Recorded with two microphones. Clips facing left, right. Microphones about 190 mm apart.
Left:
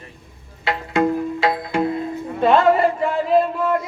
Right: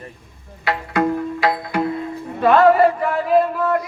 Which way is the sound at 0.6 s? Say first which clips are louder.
Even; 25° left (ahead or behind).